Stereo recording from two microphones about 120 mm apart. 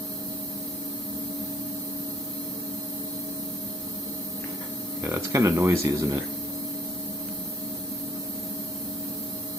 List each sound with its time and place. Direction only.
5.0 s speech: 20° right (ahead or behind)